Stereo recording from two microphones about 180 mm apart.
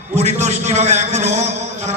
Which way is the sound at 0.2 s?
40° right (ahead or behind).